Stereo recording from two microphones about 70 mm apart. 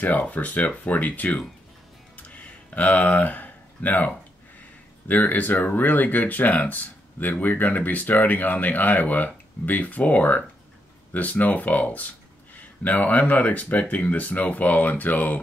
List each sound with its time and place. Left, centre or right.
0.0 s speech: left
2.1 s a sound: left
5.0 s speech: left